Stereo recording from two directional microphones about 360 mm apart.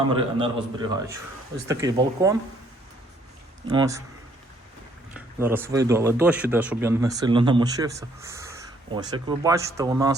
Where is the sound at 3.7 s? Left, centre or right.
Centre.